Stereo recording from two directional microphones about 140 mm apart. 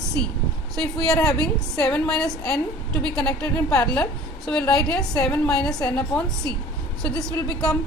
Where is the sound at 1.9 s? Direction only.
5° left (ahead or behind).